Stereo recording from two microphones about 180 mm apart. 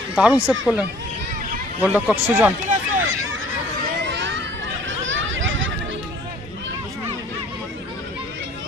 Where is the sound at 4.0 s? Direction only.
85° right.